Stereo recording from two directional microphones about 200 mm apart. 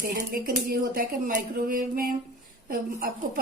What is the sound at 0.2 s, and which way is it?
A woman's voice, 45° right (ahead or behind).